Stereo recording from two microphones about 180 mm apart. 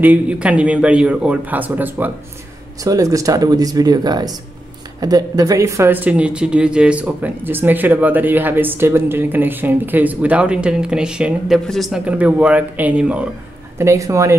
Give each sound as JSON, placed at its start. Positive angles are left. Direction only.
{"t": 0.0, "sound": "speech", "side_deg": -10}
{"t": 13.7, "sound": "speech", "side_deg": -15}